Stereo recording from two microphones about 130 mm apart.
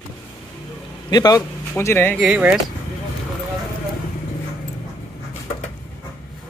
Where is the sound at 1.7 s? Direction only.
20° left (ahead or behind).